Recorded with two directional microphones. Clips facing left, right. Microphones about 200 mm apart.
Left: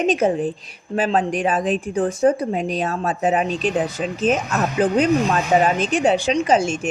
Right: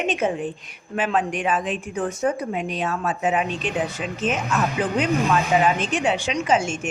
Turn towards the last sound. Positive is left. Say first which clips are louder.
# left 4 dB
turn(degrees=35)  # may be behind; listen again after turning